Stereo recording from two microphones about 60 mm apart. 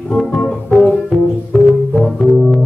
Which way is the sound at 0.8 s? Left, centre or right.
Centre.